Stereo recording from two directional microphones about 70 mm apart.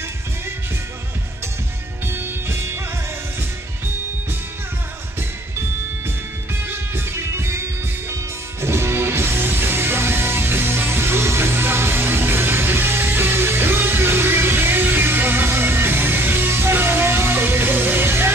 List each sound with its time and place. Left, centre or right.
2.0 s music: right
6.7 s music: right